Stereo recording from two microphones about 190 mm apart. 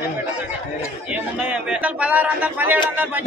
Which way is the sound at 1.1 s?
5° right (ahead or behind).